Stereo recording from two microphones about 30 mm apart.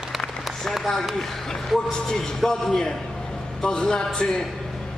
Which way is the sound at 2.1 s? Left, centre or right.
Centre.